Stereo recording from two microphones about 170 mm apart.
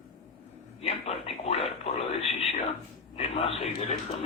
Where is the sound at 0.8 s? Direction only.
35° left (ahead or behind).